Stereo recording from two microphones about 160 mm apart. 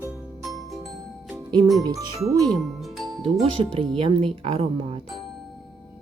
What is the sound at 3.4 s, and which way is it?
Speech, 35° right (ahead or behind).